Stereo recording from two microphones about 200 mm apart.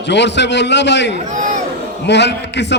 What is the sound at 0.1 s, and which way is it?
A man's voice, 60° left (ahead or behind).